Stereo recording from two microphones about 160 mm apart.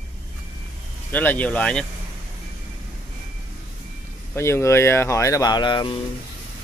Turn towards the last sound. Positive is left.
turn(degrees=30)  # may be behind; listen again after turning